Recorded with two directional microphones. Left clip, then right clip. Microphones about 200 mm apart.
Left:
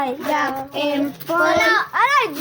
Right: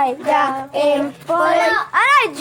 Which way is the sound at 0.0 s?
30° left (ahead or behind).